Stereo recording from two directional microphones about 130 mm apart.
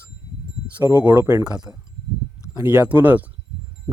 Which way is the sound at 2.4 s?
5° right (ahead or behind).